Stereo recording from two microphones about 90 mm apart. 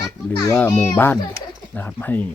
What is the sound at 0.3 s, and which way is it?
A child's voice, 25° left (ahead or behind).